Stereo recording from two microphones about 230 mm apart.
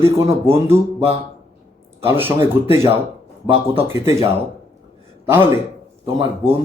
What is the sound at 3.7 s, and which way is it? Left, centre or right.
Speech, centre.